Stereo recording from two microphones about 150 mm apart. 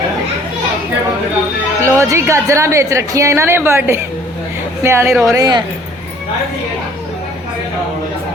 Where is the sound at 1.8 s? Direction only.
20° right (ahead or behind).